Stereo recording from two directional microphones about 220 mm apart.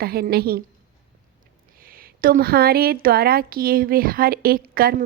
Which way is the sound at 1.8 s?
40° right (ahead or behind).